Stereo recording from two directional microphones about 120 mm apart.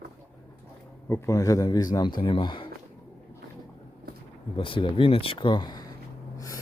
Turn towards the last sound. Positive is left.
turn(degrees=35)  # may be behind; listen again after turning